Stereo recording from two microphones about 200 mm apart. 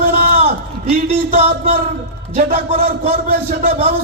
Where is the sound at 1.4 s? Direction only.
50° right (ahead or behind).